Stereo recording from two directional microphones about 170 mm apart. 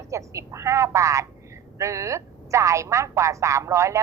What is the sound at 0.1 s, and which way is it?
Telephone, 15° right (ahead or behind).